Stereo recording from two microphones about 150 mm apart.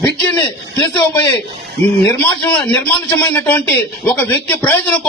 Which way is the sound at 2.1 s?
10° left (ahead or behind).